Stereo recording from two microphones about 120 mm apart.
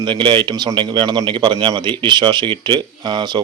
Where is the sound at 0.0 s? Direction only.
45° right (ahead or behind).